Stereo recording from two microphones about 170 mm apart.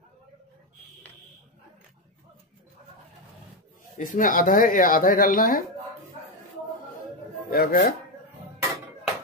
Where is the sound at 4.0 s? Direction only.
55° left (ahead or behind).